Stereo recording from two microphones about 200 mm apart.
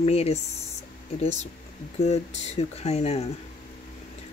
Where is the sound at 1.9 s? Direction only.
35° left (ahead or behind).